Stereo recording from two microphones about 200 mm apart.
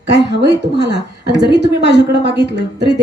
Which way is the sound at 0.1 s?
60° right (ahead or behind).